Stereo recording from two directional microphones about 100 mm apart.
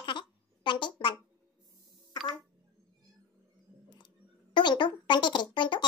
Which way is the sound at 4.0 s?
50° left (ahead or behind).